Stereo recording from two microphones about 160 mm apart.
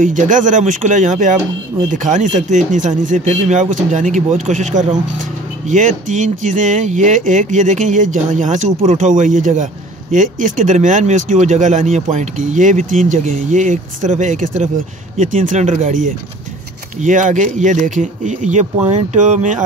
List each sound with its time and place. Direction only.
0.0 s speech: 55° right (ahead or behind)
17.0 s speech: 50° right (ahead or behind)